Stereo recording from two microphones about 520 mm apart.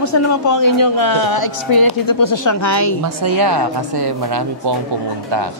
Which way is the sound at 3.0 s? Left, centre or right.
Right.